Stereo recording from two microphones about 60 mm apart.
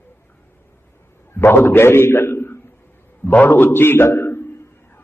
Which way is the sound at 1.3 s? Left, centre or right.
Left.